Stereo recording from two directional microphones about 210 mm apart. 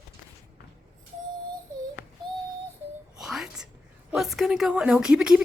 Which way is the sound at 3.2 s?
Centre (ahead or behind).